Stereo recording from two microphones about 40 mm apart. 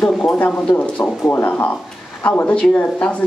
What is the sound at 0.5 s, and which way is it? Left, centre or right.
Speech, left.